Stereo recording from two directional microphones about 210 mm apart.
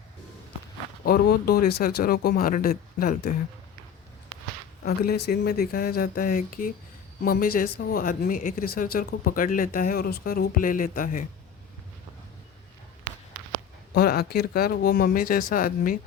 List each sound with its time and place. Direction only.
1.0 s speech: 45° left (ahead or behind)
4.8 s speech: 50° left (ahead or behind)
13.9 s speech: 45° left (ahead or behind)